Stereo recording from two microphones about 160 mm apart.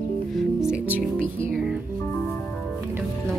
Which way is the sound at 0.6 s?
5° right (ahead or behind).